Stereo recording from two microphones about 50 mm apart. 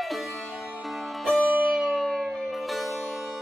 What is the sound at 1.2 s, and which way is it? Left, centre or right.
Music, centre.